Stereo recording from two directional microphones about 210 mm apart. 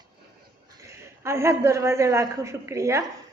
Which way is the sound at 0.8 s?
15° right (ahead or behind).